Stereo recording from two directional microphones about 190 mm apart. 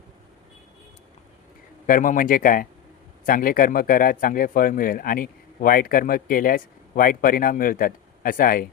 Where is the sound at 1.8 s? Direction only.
45° left (ahead or behind).